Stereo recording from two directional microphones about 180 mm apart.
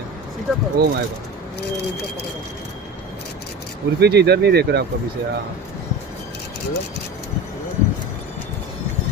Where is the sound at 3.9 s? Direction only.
65° right (ahead or behind).